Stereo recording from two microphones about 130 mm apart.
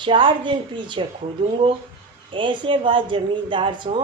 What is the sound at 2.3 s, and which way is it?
A woman's voice, 40° right (ahead or behind).